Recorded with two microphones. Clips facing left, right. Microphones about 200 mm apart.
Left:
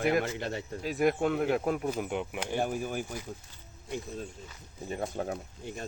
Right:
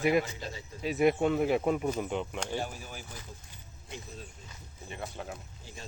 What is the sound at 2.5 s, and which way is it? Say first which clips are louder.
Speech: left 6 dB; 55° left (ahead or behind).